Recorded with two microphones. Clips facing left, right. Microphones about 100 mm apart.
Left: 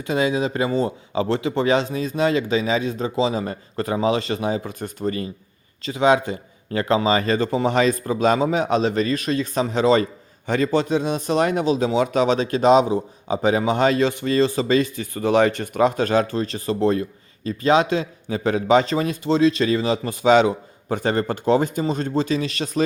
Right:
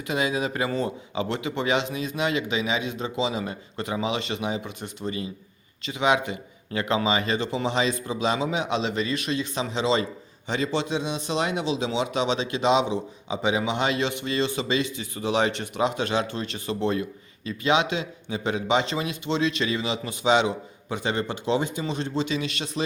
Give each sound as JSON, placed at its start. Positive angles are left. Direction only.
{"t": 0.1, "sound": "speech", "side_deg": 30}
{"t": 5.8, "sound": "a man's voice", "side_deg": 35}